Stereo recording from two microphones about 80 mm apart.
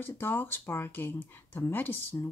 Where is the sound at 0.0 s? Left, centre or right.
Left.